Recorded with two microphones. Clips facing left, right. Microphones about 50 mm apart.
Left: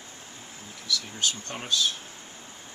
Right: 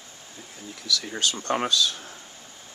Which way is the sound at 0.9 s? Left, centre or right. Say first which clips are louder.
Right 3 dB; right.